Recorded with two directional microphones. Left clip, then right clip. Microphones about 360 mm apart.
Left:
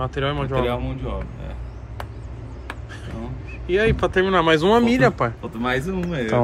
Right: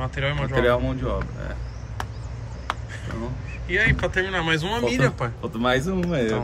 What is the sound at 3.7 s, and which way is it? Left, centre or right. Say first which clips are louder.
Speech: left 2 dB; centre.